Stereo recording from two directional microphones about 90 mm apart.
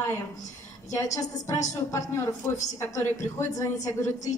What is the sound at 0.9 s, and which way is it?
A woman's voice, 40° left (ahead or behind).